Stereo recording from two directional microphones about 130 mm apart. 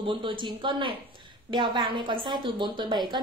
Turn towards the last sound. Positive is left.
turn(degrees=-35)  # may be behind; listen again after turning